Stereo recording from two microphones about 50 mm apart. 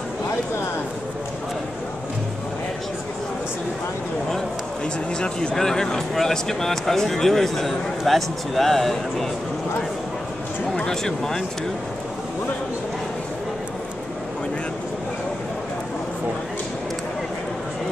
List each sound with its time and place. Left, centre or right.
5.2 s speech: centre
10.7 s speech: centre